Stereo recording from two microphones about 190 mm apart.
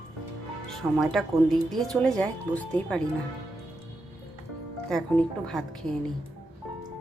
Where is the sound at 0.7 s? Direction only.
Centre (ahead or behind).